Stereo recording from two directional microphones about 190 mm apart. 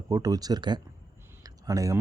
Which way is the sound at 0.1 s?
20° right (ahead or behind).